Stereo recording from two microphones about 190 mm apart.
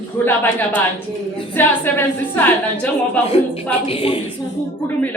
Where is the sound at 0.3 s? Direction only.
10° left (ahead or behind).